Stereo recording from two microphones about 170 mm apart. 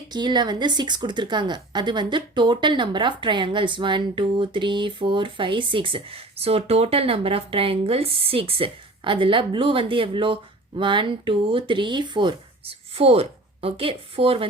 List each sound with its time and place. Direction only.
0.1 s a woman's voice: 25° right (ahead or behind)